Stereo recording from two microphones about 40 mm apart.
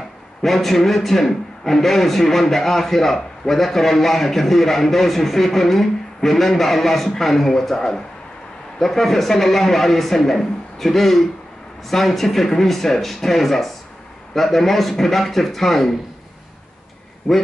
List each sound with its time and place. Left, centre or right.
0.4 s a man's voice: centre